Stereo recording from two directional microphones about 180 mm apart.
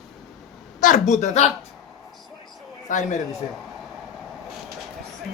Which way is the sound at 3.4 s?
35° left (ahead or behind).